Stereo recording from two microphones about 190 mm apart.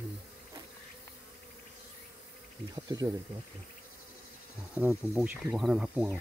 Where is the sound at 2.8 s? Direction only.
20° right (ahead or behind).